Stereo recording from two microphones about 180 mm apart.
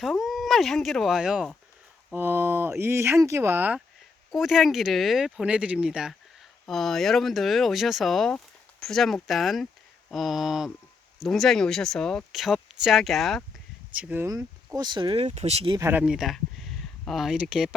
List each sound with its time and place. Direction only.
0.0 s speech: centre (ahead or behind); by 15.8 s 30° right (ahead or behind)
15.8 s speech: 10° right (ahead or behind)